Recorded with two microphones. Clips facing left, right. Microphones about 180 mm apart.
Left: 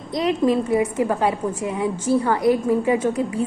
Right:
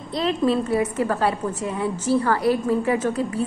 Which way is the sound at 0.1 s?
15° left (ahead or behind).